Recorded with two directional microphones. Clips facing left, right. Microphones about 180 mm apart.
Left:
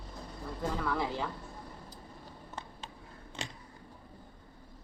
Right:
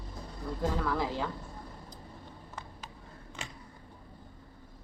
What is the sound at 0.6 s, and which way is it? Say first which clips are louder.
Speech: right 2 dB; centre (ahead or behind).